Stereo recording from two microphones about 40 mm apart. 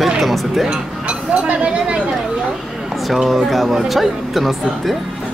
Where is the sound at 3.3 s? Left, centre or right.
Centre.